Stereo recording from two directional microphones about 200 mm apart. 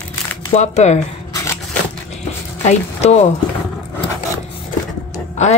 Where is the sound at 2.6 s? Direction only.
35° left (ahead or behind).